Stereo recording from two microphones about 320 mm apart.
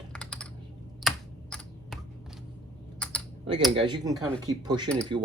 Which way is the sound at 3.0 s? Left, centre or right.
Centre.